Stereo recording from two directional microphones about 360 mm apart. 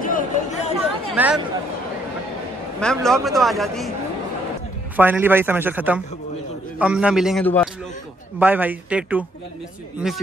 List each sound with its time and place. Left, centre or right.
0.0 s chatter: left
1.1 s speech: centre
2.8 s a man's voice: centre
4.9 s a man's voice: centre